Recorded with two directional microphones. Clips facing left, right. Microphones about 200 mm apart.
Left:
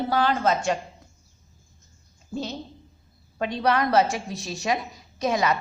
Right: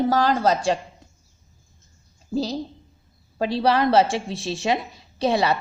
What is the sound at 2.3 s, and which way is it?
A woman's voice, 35° right (ahead or behind).